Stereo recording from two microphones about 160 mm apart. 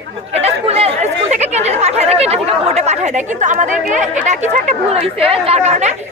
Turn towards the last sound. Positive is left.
turn(degrees=-45)  # may be behind; listen again after turning